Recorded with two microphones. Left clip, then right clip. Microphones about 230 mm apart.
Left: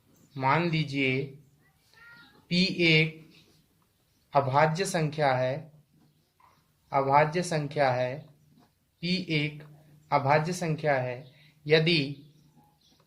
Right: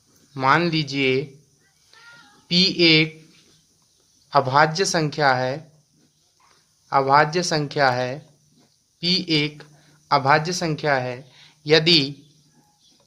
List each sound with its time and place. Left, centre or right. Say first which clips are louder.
0.3 s speech: right 8 dB; right
2.5 s speech: right 8 dB; right
4.3 s speech: right 7 dB; right
6.9 s a man's voice: right 7 dB; right